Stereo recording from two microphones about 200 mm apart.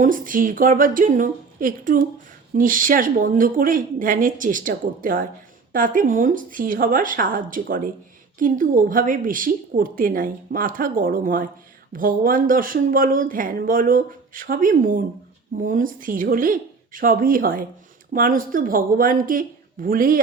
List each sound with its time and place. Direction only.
0.0 s a woman's voice: 40° right (ahead or behind)